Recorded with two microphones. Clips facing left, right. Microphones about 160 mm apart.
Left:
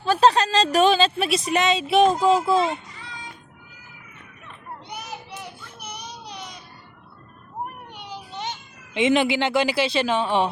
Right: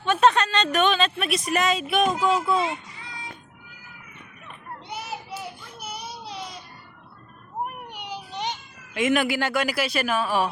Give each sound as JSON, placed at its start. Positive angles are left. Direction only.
{"t": 0.0, "sound": "speech", "side_deg": 30}
{"t": 4.9, "sound": "child singing", "side_deg": -5}
{"t": 7.9, "sound": "a sound", "side_deg": -15}
{"t": 8.9, "sound": "speech", "side_deg": 25}